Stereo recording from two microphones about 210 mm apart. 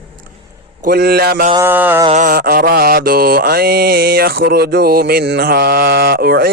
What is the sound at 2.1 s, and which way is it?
Mantra, 40° right (ahead or behind).